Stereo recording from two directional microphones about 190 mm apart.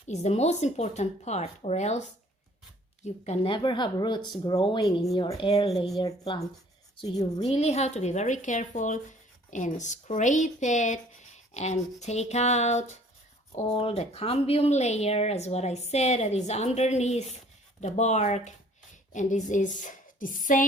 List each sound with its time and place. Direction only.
0.1 s speech: 35° left (ahead or behind)
5.7 s speech: centre (ahead or behind)
6.0 s speech: 25° left (ahead or behind)
7.4 s speech: 35° left (ahead or behind)